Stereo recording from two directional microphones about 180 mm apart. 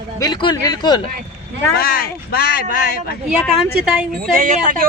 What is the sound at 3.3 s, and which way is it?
Speech, centre (ahead or behind).